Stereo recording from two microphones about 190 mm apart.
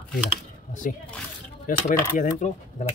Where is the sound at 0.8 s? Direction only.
45° left (ahead or behind).